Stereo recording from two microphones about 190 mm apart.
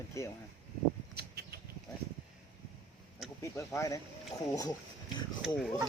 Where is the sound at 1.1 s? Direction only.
55° right (ahead or behind).